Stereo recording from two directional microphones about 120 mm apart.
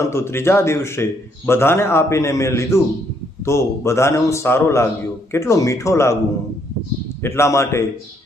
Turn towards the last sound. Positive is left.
turn(degrees=25)  # may be behind; listen again after turning